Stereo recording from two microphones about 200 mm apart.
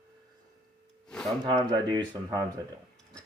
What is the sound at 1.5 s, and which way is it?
Speech, 20° right (ahead or behind).